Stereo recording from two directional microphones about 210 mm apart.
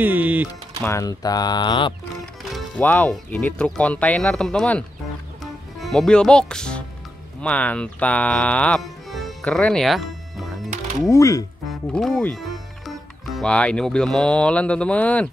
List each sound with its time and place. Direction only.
0.0 s speech: 10° right (ahead or behind)
0.8 s speech: 15° left (ahead or behind)
2.5 s speech: 10° left (ahead or behind)
7.4 s music: 5° left (ahead or behind)
11.0 s speech: 15° left (ahead or behind)